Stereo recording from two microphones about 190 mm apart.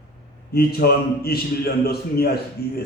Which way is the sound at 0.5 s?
55° left (ahead or behind).